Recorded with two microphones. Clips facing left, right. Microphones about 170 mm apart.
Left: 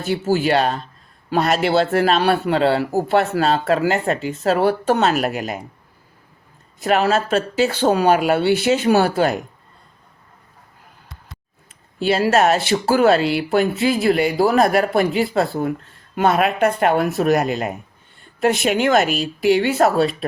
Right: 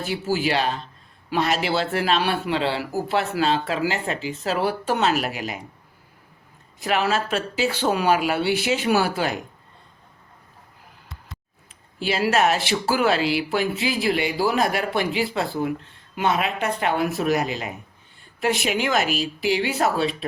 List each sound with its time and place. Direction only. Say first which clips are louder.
0.3 s a man's voice: left 5 dB; 50° left (ahead or behind)
6.8 s a man's voice: left 5 dB; 40° left (ahead or behind)
12.1 s a man's voice: left 4 dB; 40° left (ahead or behind)
19.0 s speech: left 6 dB; centre (ahead or behind)
19.5 s a man's voice: left 4 dB; 50° left (ahead or behind)